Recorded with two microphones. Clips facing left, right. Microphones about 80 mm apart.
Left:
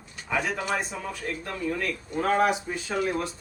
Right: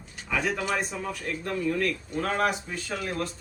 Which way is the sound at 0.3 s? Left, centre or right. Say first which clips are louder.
Even; centre.